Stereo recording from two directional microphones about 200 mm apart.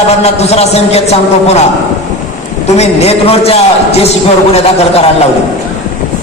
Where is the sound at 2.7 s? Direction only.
30° left (ahead or behind).